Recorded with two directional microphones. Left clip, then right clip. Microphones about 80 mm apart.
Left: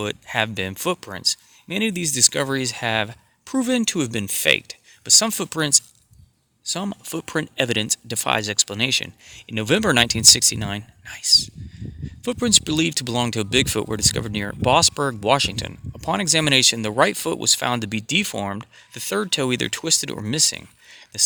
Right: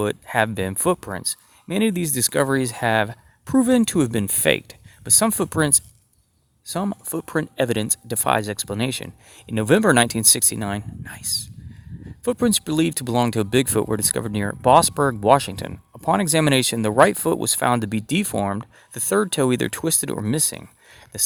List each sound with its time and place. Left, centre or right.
0.0 s speech: right
6.9 s speech: centre